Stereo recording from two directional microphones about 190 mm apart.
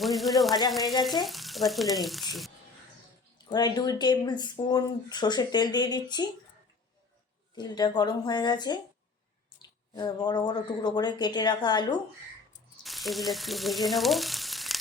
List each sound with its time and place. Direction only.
0.0 s speech: centre (ahead or behind)
3.5 s speech: 20° left (ahead or behind)
7.5 s speech: 20° left (ahead or behind)
12.8 s frying: centre (ahead or behind)